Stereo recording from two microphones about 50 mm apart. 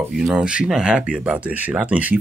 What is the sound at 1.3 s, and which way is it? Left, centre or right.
Speech, right.